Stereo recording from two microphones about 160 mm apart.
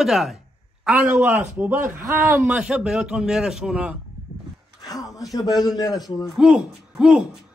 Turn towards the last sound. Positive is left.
turn(degrees=0)  # may be behind; listen again after turning